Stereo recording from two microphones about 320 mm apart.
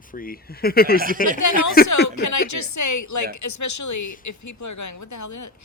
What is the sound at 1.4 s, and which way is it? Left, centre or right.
A woman's voice, left.